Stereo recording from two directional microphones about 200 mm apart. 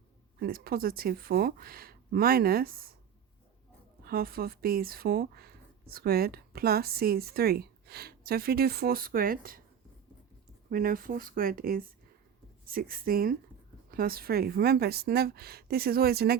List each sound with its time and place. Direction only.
0.3 s speech: 50° right (ahead or behind)
4.0 s speech: 50° right (ahead or behind)
10.7 s speech: 45° right (ahead or behind)